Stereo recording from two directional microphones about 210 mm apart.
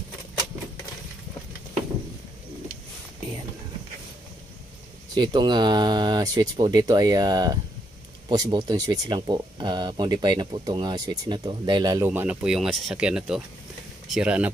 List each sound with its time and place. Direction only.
5.1 s speech: 20° right (ahead or behind); by 14.5 s 5° right (ahead or behind)